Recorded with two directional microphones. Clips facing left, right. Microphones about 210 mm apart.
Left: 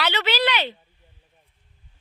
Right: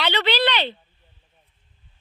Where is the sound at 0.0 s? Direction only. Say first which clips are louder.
Right 2 dB; 5° left (ahead or behind).